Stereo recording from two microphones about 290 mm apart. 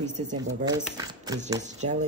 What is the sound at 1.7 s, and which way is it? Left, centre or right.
Speech, right.